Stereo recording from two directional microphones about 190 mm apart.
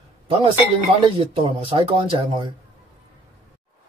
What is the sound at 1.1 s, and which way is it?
Speech, 25° right (ahead or behind).